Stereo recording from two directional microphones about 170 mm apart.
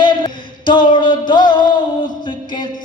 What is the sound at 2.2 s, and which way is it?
Music, 25° left (ahead or behind).